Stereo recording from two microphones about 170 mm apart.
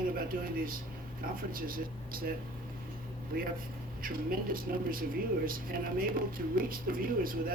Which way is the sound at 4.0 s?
55° right (ahead or behind).